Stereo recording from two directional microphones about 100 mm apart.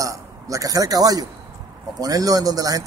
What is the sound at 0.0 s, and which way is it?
A man's voice, 35° right (ahead or behind).